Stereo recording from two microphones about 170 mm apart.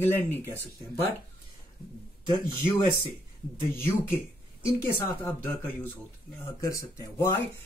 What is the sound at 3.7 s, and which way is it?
Speech, 15° left (ahead or behind).